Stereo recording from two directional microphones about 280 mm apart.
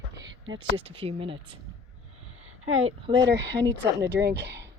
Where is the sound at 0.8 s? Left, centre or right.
Centre.